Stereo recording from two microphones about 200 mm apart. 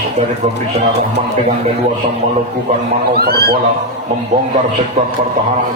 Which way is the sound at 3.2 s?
50° right (ahead or behind).